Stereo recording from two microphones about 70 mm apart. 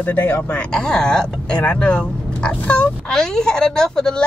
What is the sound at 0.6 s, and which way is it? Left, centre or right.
Speech, centre.